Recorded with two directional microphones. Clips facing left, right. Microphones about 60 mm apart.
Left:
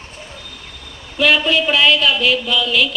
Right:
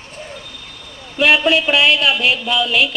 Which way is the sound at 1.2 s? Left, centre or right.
Right.